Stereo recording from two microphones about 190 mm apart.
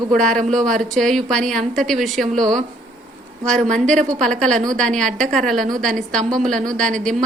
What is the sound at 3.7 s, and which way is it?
Speech, 5° left (ahead or behind).